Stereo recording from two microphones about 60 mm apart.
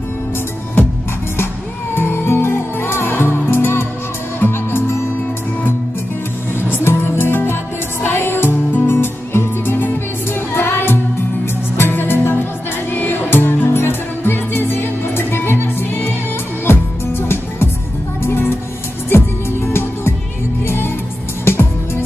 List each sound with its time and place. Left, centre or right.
2.0 s music: left
6.7 s music: left